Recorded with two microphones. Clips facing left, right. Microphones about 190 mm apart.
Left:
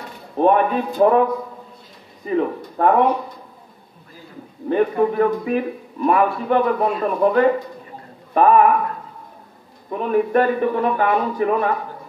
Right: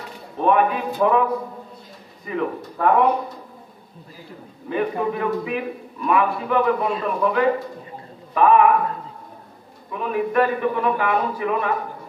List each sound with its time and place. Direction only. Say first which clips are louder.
0.4 s a man's voice: left 3 dB; 40° left (ahead or behind)
2.2 s speech: left 4 dB; 35° left (ahead or behind)
4.6 s a man's voice: left 5 dB; 40° left (ahead or behind)
9.8 s a man's voice: left 4 dB; 40° left (ahead or behind)